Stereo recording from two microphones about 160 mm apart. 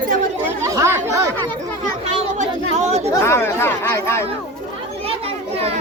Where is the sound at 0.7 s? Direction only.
15° right (ahead or behind).